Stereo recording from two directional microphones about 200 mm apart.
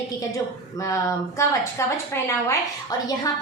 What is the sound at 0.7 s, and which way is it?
A woman's voice, 15° left (ahead or behind).